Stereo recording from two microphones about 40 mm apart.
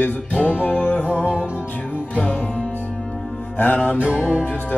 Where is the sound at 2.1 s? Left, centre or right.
Left.